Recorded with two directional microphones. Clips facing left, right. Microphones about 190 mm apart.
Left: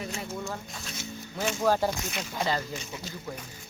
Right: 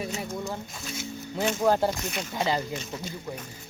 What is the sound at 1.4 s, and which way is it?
Speech, 15° right (ahead or behind).